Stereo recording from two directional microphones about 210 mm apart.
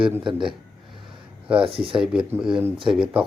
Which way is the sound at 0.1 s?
5° right (ahead or behind).